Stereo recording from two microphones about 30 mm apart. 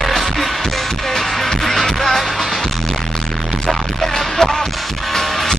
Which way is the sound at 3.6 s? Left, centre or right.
Centre.